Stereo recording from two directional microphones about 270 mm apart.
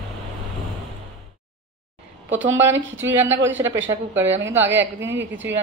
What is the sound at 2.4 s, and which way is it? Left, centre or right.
Speech, right.